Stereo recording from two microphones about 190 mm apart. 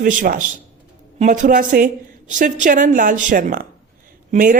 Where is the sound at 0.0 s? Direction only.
45° right (ahead or behind).